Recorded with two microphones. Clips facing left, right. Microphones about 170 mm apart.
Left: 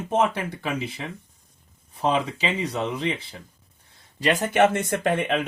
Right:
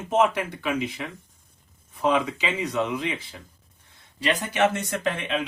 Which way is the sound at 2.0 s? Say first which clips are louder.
Even; 30° left (ahead or behind).